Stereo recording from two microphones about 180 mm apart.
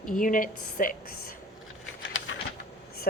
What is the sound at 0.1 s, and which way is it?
A woman's voice, 50° left (ahead or behind).